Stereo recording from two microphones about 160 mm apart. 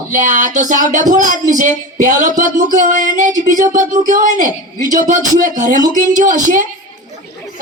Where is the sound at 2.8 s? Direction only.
55° right (ahead or behind).